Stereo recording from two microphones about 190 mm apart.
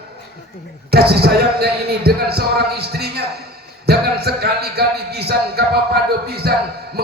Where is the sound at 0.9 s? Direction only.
55° right (ahead or behind).